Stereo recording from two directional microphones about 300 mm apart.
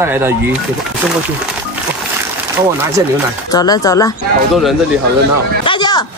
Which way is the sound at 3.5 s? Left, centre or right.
Centre.